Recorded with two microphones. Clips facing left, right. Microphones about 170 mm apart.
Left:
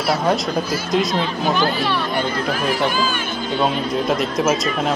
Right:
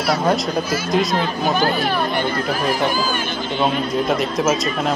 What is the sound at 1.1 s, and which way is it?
Speech, 45° right (ahead or behind).